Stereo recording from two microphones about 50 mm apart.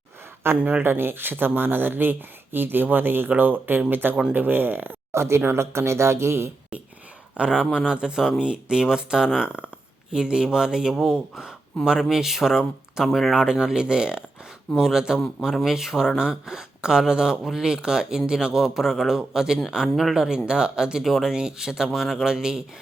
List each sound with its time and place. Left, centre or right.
0.4 s speech: right
5.1 s speech: right
7.3 s speech: right